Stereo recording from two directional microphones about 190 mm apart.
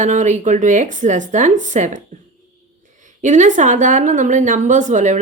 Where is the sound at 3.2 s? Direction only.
40° right (ahead or behind).